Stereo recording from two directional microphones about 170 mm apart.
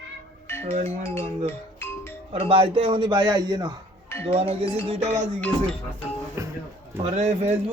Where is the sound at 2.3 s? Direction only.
35° right (ahead or behind).